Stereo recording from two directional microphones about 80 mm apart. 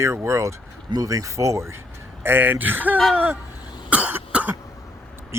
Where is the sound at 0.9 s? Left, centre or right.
Right.